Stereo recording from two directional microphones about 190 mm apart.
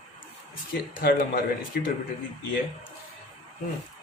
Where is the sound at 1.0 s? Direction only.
50° left (ahead or behind).